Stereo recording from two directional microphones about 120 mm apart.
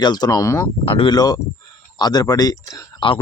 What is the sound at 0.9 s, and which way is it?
Speech, 50° left (ahead or behind).